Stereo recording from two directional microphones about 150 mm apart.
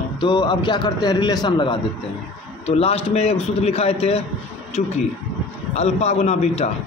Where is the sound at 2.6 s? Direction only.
40° left (ahead or behind).